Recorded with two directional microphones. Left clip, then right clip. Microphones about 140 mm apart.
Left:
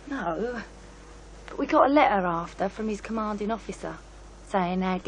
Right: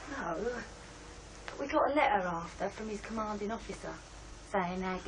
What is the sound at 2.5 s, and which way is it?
Speech, 45° left (ahead or behind).